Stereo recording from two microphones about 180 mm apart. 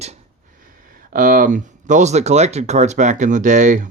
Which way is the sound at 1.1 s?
50° right (ahead or behind).